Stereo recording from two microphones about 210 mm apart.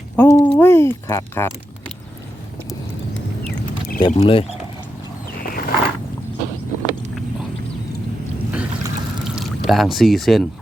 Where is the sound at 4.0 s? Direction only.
25° left (ahead or behind).